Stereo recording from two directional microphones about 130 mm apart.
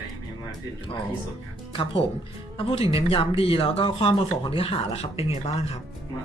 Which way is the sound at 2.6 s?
45° left (ahead or behind).